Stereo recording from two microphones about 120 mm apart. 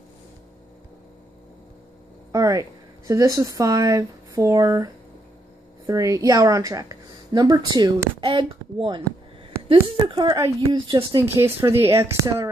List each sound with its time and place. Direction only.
2.3 s a sound: 30° right (ahead or behind)
3.1 s a woman's voice: 30° right (ahead or behind)
11.2 s speech: 20° right (ahead or behind)